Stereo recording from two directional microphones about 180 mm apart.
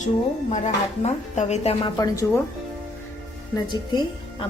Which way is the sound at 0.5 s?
40° left (ahead or behind).